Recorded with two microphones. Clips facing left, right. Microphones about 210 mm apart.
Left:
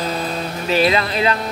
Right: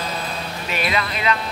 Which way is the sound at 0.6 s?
30° left (ahead or behind).